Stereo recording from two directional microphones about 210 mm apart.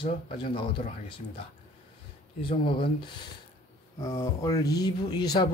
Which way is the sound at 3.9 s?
20° left (ahead or behind).